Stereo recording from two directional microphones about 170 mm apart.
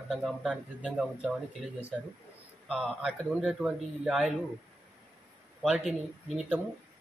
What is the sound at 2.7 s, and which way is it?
Speech, 5° right (ahead or behind).